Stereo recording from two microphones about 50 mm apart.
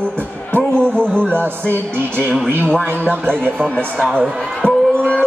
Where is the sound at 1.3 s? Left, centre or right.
Right.